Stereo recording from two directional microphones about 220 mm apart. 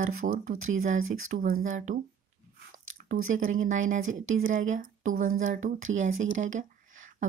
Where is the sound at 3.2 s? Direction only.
35° right (ahead or behind).